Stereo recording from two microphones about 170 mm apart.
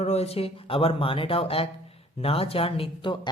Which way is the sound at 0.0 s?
40° left (ahead or behind).